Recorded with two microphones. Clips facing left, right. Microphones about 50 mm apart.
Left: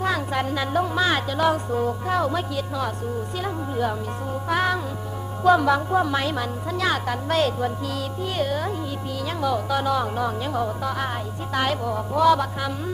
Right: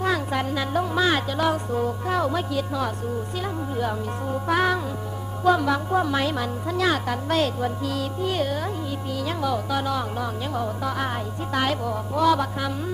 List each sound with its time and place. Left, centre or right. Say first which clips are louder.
0.0 s music: even; centre
0.4 s a woman's voice: left 1 dB; centre
0.9 s music: even; centre
3.4 s a woman's voice: left 2 dB; centre
4.5 s music: right 1 dB; centre
5.5 s music: left 3 dB; centre
5.9 s a woman's voice: left 1 dB; centre
10.8 s music: even; centre